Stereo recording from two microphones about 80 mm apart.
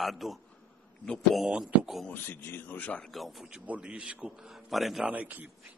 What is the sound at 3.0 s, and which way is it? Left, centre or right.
Speech, centre.